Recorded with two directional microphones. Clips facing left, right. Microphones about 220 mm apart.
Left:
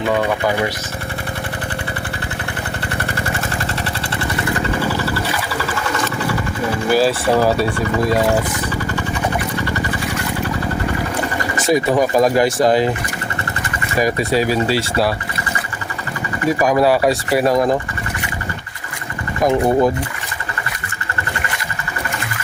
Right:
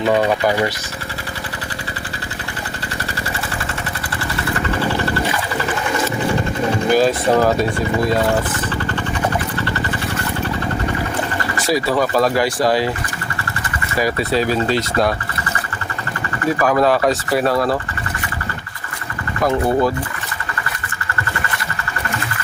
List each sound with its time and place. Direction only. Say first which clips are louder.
6.1 s vehicle: right 2 dB; 20° right (ahead or behind)
6.9 s speech: even; 5° left (ahead or behind)
9.6 s vehicle: left 1 dB; 10° left (ahead or behind)
11.3 s speech: left 4 dB; 20° left (ahead or behind)
14.0 s speech: left 1 dB; 10° left (ahead or behind)
16.4 s speech: left 1 dB; 15° left (ahead or behind)
19.4 s speech: left 2 dB; 15° left (ahead or behind)